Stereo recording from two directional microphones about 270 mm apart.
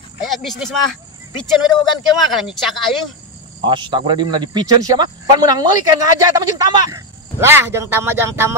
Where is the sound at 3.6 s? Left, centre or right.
Centre.